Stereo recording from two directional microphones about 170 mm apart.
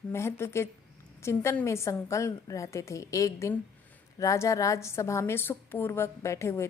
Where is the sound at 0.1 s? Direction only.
15° left (ahead or behind).